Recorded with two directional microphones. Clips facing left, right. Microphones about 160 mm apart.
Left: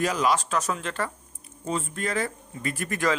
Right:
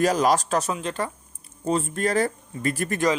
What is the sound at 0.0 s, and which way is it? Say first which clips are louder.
Speech: right 4 dB; 40° right (ahead or behind).